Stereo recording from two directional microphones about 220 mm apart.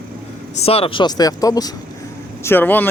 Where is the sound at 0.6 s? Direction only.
25° left (ahead or behind).